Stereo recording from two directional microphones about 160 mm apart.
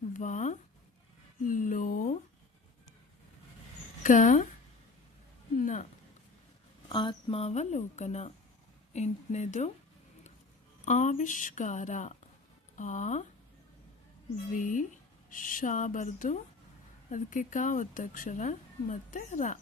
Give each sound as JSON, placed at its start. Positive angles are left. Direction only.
{"t": 0.1, "sound": "a sound", "side_deg": 50}
{"t": 4.0, "sound": "speech", "side_deg": 55}
{"t": 5.5, "sound": "a sound", "side_deg": 50}
{"t": 6.8, "sound": "speech", "side_deg": 30}
{"t": 10.8, "sound": "speech", "side_deg": 50}
{"t": 14.5, "sound": "speech", "side_deg": 55}